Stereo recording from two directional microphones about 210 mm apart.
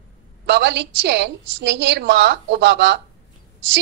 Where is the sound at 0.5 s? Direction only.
55° right (ahead or behind).